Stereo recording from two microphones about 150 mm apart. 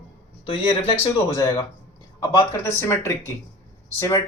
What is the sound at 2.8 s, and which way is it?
A man's voice, 15° left (ahead or behind).